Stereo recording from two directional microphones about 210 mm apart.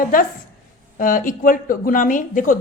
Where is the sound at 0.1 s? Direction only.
40° left (ahead or behind).